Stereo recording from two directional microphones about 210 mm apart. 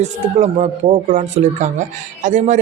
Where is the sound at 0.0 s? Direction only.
35° right (ahead or behind).